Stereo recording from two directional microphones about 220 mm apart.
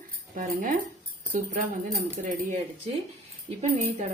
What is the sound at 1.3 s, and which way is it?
Speech, 40° right (ahead or behind).